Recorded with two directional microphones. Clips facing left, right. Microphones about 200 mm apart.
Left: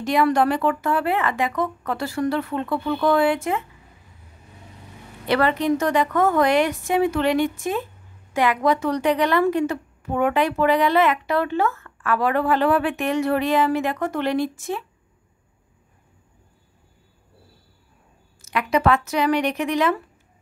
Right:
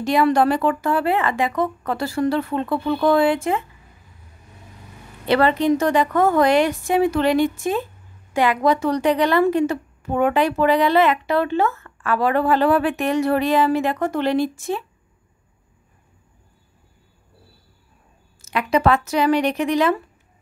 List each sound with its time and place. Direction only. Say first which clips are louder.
0.0 s a woman's voice: right 2 dB; 30° right (ahead or behind)
5.2 s a woman's voice: right 3 dB; 30° right (ahead or behind)
18.4 s a woman's voice: right 2 dB; 30° right (ahead or behind)